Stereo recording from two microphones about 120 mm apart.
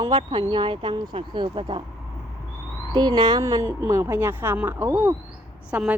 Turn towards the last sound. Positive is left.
turn(degrees=-10)  # may be behind; listen again after turning